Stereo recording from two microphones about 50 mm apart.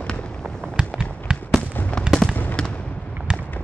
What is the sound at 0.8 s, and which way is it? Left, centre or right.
Fireworks, centre.